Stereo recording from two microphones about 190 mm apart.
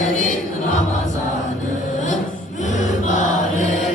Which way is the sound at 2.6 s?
40° left (ahead or behind).